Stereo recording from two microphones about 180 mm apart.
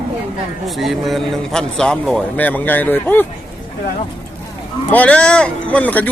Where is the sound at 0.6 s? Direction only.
Centre (ahead or behind).